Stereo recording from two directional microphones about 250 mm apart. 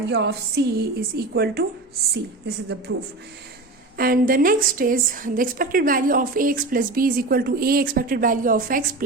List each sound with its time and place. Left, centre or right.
0.1 s a woman's voice: right
2.9 s a man's voice: right
3.9 s a woman's voice: right